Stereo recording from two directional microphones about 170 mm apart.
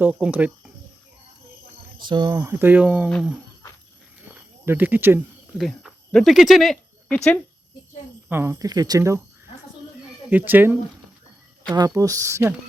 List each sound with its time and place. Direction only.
0.0 s speech: 10° right (ahead or behind)
2.0 s speech: 25° right (ahead or behind); by 3.1 s 10° right (ahead or behind)
4.6 s speech: 10° right (ahead or behind)
5.5 s speech: centre (ahead or behind)
8.3 s speech: 15° right (ahead or behind)
10.2 s speech: 10° right (ahead or behind)